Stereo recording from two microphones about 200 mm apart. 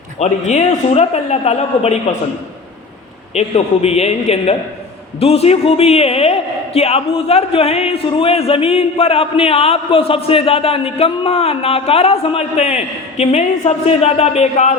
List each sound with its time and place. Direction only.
0.2 s a woman's voice: 35° left (ahead or behind)
3.3 s a woman's voice: 30° left (ahead or behind)